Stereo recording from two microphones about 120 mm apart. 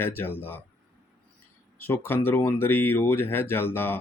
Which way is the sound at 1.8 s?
15° left (ahead or behind).